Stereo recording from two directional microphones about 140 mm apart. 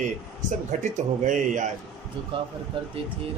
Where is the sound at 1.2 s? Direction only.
60° right (ahead or behind).